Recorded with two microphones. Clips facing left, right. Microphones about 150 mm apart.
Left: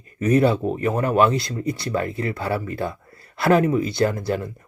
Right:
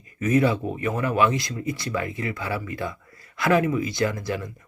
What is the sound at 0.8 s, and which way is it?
Speech, 45° left (ahead or behind).